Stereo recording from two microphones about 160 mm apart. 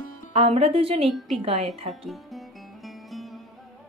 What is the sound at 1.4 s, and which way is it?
Speech, 40° right (ahead or behind).